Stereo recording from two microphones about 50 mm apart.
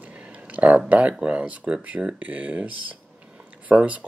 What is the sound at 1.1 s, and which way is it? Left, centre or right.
Speech, right.